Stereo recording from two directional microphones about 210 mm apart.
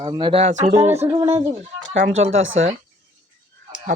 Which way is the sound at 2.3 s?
70° right (ahead or behind).